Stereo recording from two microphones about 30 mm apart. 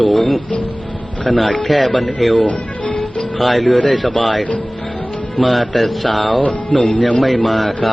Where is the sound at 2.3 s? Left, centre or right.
Left.